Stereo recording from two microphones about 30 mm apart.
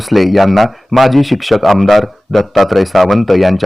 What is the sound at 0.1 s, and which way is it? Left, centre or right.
Speech, centre.